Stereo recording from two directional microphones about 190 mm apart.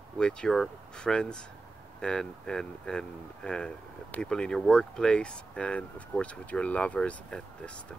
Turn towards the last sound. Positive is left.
turn(degrees=5)  # may be behind; listen again after turning